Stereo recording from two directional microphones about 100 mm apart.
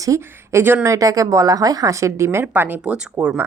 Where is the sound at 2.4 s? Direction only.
15° right (ahead or behind).